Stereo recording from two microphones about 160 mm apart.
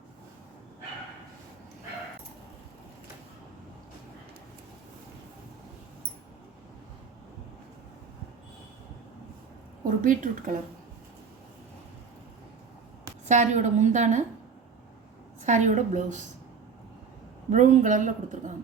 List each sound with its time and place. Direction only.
9.8 s speech: 60° right (ahead or behind)
13.2 s speech: 50° right (ahead or behind)
15.4 s speech: 50° right (ahead or behind)
17.5 s speech: 50° right (ahead or behind)